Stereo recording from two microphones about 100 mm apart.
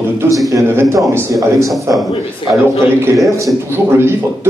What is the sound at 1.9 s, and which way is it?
Speech, 30° right (ahead or behind).